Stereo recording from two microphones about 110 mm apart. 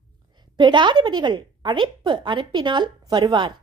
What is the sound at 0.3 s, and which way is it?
A woman's voice, 45° right (ahead or behind).